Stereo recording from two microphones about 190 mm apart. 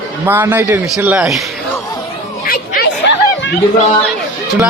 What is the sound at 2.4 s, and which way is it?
Chatter, 50° left (ahead or behind).